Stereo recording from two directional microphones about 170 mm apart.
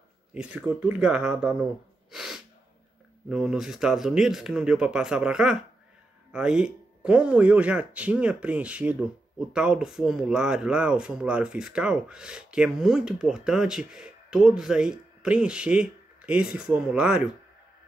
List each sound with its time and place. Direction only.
0.3 s speech: 5° right (ahead or behind)